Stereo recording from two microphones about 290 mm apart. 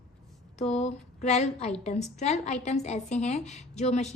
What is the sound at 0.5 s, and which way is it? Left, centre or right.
A woman's voice, left.